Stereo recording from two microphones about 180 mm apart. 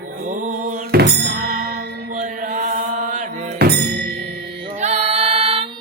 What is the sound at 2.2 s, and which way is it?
Chant, 45° right (ahead or behind).